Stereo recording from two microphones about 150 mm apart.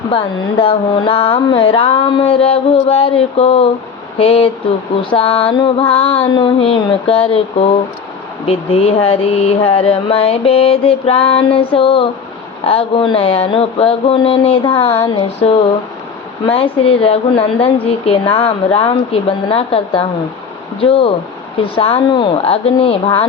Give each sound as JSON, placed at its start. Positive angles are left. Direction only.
{"t": 0.1, "sound": "speech", "side_deg": 35}
{"t": 8.4, "sound": "speech", "side_deg": 40}
{"t": 16.5, "sound": "speech", "side_deg": 35}